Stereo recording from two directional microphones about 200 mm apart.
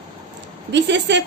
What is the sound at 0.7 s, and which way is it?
Speech, 60° right (ahead or behind).